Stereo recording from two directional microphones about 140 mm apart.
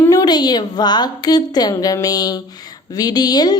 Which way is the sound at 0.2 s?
30° left (ahead or behind).